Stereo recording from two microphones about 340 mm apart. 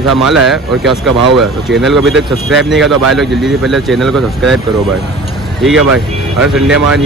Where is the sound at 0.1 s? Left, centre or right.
Centre.